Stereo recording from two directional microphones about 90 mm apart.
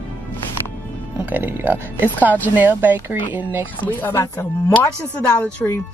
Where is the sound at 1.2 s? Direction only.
25° right (ahead or behind).